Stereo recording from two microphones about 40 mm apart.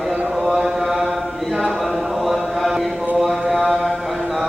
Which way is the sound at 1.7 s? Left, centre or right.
Centre.